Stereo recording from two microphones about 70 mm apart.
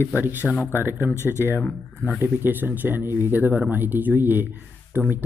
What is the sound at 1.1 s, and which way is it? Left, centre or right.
Speech, left.